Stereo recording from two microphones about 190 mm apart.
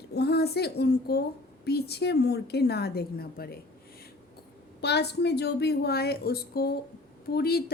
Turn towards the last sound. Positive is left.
turn(degrees=55)  # may be behind; listen again after turning